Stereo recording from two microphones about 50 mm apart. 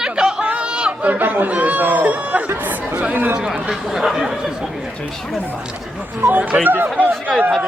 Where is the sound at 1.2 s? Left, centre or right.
Right.